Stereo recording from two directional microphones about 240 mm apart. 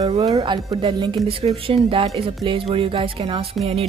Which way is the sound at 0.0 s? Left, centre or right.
Centre.